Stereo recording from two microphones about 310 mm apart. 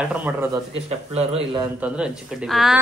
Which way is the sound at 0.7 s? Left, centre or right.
Centre.